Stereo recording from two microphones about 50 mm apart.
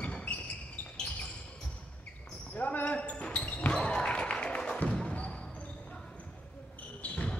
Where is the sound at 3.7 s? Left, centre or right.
Centre.